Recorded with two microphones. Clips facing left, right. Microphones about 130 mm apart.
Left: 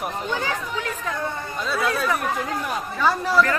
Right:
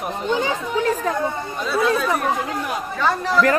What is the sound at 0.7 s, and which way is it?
Speech, 35° right (ahead or behind).